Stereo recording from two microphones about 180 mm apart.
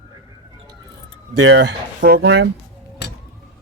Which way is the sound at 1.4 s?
80° right.